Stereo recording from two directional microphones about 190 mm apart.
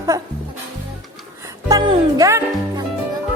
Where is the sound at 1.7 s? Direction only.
20° right (ahead or behind).